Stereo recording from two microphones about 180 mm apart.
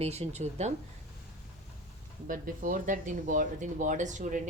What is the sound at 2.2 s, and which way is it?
Speech, 45° right (ahead or behind).